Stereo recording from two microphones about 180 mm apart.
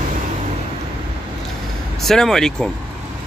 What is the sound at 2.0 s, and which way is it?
Speech, centre (ahead or behind).